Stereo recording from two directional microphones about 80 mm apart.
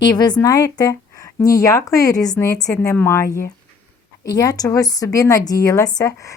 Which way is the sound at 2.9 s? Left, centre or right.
Left.